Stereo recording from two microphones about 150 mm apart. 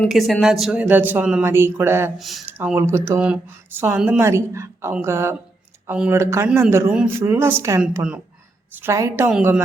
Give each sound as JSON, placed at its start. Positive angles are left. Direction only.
{"t": 0.0, "sound": "speech", "side_deg": 0}
{"t": 2.1, "sound": "speech", "side_deg": 0}
{"t": 2.5, "sound": "speech", "side_deg": -10}